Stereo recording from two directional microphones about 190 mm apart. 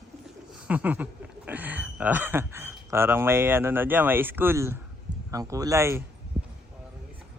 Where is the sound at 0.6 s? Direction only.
10° right (ahead or behind).